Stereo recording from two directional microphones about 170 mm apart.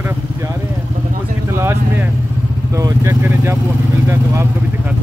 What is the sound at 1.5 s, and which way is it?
Speech, 15° right (ahead or behind).